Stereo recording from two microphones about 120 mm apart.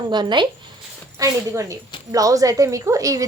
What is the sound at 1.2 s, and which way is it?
A woman's voice, 25° right (ahead or behind).